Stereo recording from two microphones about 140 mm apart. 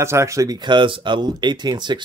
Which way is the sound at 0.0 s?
20° right (ahead or behind).